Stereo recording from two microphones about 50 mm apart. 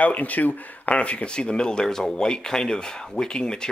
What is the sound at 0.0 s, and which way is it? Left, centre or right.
Speech, left.